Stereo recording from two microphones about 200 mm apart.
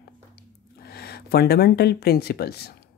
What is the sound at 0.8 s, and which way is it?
Speech, 50° left (ahead or behind).